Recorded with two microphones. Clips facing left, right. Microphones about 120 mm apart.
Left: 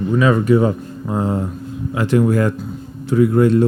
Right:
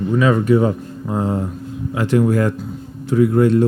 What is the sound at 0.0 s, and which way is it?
Speech, 25° left (ahead or behind).